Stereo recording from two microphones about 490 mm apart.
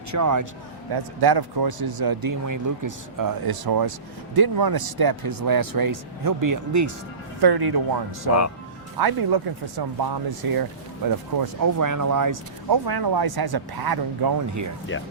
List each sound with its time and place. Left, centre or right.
0.1 s speech: right
0.9 s speech: right
7.4 s speech: right